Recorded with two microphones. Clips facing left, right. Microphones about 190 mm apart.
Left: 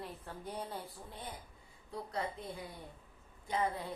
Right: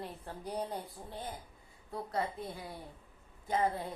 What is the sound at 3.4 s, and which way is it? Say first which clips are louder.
Speech: right 3 dB; 40° right (ahead or behind).